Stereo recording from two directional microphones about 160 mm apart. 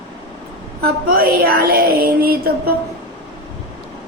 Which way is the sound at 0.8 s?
70° right (ahead or behind).